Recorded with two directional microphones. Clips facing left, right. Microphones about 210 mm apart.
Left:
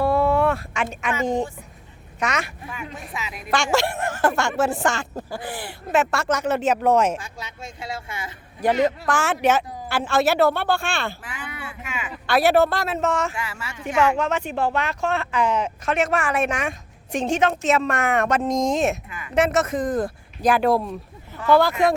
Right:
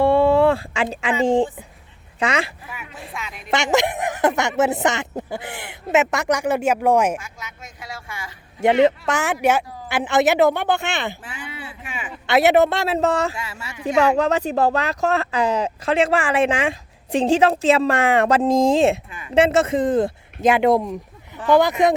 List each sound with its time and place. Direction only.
0.0 s a sound: 30° right (ahead or behind)
1.2 s a woman's voice: 30° right (ahead or behind)
3.1 s speech: 5° left (ahead or behind)
3.5 s speech: 20° right (ahead or behind)
7.2 s a sound: 30° left (ahead or behind)
8.6 s speech: 25° right (ahead or behind)
11.6 s a sound: 30° right (ahead or behind)
13.3 s speech: 25° right (ahead or behind)
13.8 s speech: 35° right (ahead or behind); by 21.9 s 20° right (ahead or behind)